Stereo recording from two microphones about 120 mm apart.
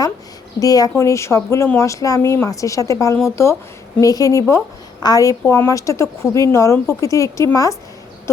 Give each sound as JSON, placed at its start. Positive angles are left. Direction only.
{"t": 0.6, "sound": "a woman's voice", "side_deg": 30}